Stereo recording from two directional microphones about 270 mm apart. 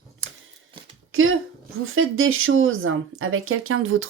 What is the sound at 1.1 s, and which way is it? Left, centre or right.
Speech, right.